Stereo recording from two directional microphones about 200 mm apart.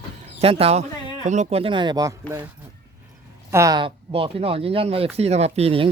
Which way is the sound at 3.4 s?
15° right (ahead or behind).